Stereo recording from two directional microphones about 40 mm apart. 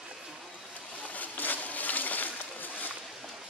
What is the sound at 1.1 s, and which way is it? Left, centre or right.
Splash, left.